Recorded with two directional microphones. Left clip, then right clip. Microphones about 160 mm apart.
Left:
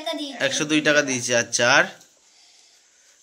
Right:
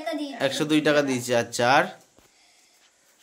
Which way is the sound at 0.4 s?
15° right (ahead or behind).